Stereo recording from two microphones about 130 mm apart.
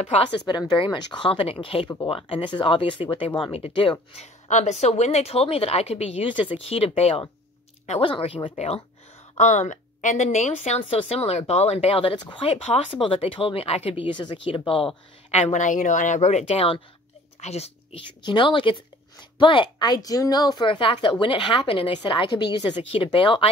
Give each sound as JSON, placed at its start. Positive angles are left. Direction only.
{"t": 0.0, "sound": "a woman's voice", "side_deg": 40}
{"t": 4.5, "sound": "a woman's voice", "side_deg": 60}
{"t": 8.5, "sound": "a woman's voice", "side_deg": 55}
{"t": 9.4, "sound": "a woman's voice", "side_deg": 70}
{"t": 15.3, "sound": "a woman's voice", "side_deg": 65}
{"t": 18.2, "sound": "a woman's voice", "side_deg": 40}